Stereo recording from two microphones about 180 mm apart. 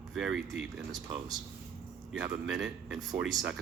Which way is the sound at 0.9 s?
20° right (ahead or behind).